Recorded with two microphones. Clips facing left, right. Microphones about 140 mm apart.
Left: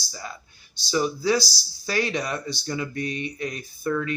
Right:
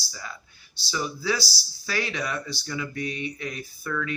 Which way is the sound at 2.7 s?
40° left (ahead or behind).